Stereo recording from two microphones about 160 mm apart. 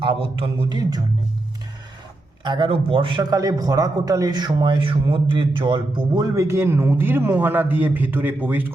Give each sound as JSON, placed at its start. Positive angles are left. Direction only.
{"t": 0.0, "sound": "a man's voice", "side_deg": -35}
{"t": 2.4, "sound": "a man's voice", "side_deg": -30}